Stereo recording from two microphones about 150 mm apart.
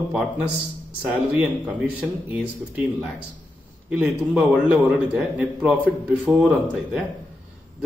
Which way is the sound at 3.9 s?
10° right (ahead or behind).